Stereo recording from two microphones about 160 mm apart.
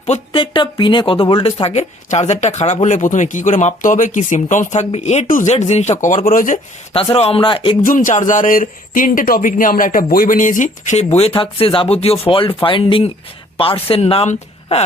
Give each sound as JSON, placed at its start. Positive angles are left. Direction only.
{"t": 0.3, "sound": "speech", "side_deg": 30}
{"t": 6.9, "sound": "speech", "side_deg": 35}
{"t": 7.9, "sound": "speech", "side_deg": 55}